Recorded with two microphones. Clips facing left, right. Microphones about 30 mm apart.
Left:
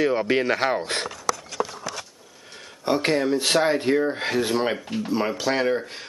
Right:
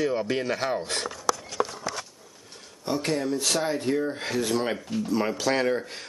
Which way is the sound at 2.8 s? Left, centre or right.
Left.